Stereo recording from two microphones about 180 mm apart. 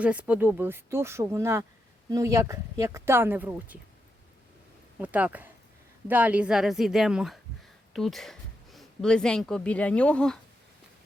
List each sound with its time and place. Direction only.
0.0 s speech: 5° right (ahead or behind)
4.9 s a woman's voice: 10° right (ahead or behind)